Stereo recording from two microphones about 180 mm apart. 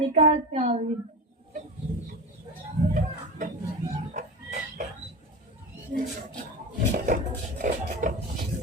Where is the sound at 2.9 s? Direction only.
45° right (ahead or behind).